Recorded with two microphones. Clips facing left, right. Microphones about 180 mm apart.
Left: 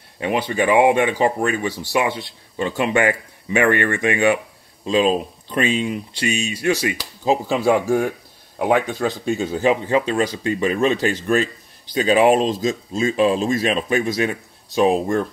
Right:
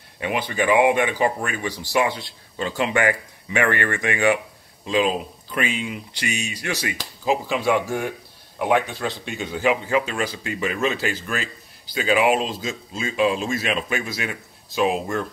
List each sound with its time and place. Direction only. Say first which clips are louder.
0.2 s speech: left 4 dB; 25° left (ahead or behind)